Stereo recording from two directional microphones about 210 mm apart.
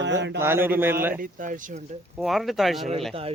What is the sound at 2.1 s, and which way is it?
Speech, centre (ahead or behind).